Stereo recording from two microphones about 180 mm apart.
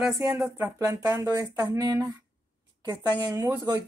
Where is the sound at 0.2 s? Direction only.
15° right (ahead or behind).